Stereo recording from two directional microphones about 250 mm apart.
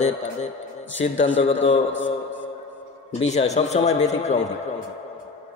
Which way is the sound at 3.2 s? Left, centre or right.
Left.